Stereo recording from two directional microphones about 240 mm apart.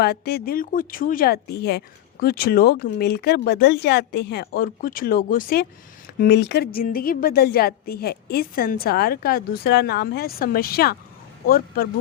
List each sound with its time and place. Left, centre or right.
0.0 s speech: left